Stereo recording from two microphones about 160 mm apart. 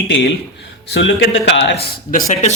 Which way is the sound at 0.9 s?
90° left.